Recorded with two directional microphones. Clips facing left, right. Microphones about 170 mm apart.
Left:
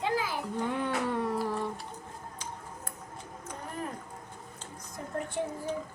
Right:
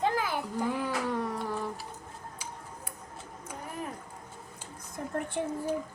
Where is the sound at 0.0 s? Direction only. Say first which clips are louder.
Right 2 dB; 55° right (ahead or behind).